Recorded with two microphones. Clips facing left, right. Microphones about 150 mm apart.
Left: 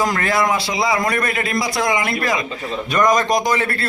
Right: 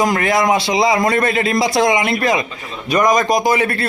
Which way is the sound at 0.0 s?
20° right (ahead or behind).